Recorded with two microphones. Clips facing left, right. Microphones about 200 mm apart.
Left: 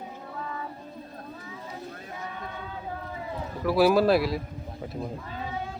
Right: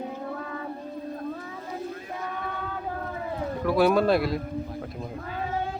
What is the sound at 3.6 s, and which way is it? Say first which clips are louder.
Speech: left 1 dB; 5° left (ahead or behind).